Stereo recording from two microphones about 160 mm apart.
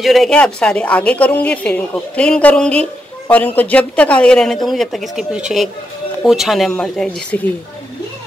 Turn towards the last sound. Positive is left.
turn(degrees=5)  # may be behind; listen again after turning